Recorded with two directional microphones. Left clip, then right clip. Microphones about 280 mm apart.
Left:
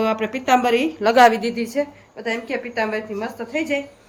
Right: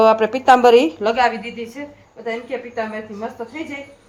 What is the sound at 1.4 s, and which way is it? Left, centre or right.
Speech, centre.